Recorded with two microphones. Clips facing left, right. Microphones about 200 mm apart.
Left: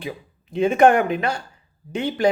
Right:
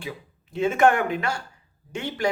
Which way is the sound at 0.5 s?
20° left (ahead or behind).